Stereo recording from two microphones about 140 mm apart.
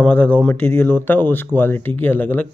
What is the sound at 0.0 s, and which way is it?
Speech, 15° left (ahead or behind).